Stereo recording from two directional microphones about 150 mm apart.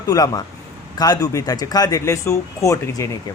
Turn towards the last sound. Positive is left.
turn(degrees=20)  # may be behind; listen again after turning